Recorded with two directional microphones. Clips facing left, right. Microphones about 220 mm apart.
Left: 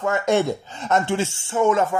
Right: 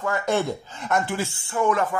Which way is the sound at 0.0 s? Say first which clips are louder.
Left 4 dB; 20° left (ahead or behind).